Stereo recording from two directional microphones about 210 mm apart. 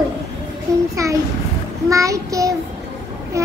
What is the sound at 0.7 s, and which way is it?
Child singing, 15° right (ahead or behind).